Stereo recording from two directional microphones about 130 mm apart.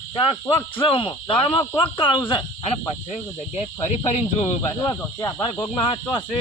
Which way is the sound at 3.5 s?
55° left (ahead or behind).